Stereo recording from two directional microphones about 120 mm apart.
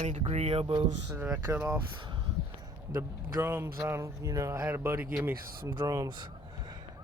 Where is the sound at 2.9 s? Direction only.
20° right (ahead or behind).